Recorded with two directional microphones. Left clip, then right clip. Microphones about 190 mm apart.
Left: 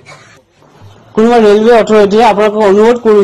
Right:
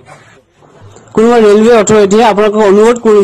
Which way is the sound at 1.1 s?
35° right (ahead or behind).